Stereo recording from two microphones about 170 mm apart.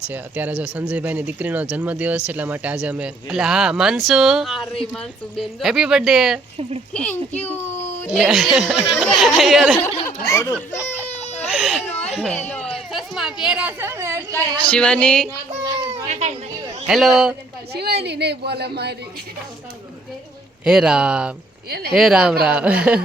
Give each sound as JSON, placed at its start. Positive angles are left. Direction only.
{"t": 0.1, "sound": "a man's voice", "side_deg": -10}
{"t": 7.4, "sound": "speech", "side_deg": 15}
{"t": 8.1, "sound": "a man's voice", "side_deg": 0}
{"t": 10.1, "sound": "speech", "side_deg": 20}
{"t": 11.3, "sound": "baby cry", "side_deg": 0}
{"t": 12.0, "sound": "a woman's voice", "side_deg": 0}
{"t": 14.7, "sound": "speech", "side_deg": 5}
{"t": 16.0, "sound": "a sound", "side_deg": -40}
{"t": 16.8, "sound": "a man's voice", "side_deg": 0}
{"t": 17.7, "sound": "speech", "side_deg": -70}
{"t": 20.7, "sound": "a man's voice", "side_deg": -5}
{"t": 21.7, "sound": "speech", "side_deg": -65}
{"t": 21.9, "sound": "a man's voice", "side_deg": -5}